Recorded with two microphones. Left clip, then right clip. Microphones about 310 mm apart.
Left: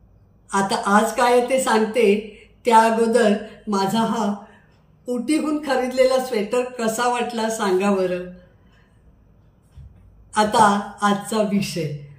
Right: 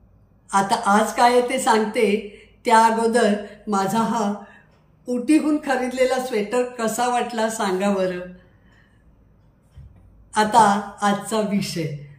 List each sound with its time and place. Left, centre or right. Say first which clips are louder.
0.5 s speech: right 1 dB; centre
3.7 s speech: even; right
5.0 s speech: right 3 dB; centre
10.3 s speech: even; centre